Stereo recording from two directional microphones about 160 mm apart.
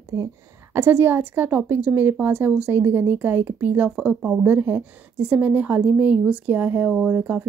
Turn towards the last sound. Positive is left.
turn(degrees=-10)  # may be behind; listen again after turning